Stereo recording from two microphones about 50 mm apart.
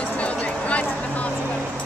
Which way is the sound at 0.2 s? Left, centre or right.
Left.